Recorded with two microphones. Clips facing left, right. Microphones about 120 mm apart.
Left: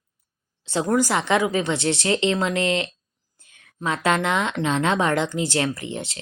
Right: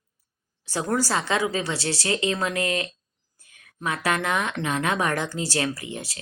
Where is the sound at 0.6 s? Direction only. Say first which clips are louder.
Left 4 dB; 25° left (ahead or behind).